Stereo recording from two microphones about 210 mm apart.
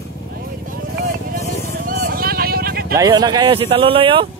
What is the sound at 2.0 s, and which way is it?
Sheep, 45° right (ahead or behind).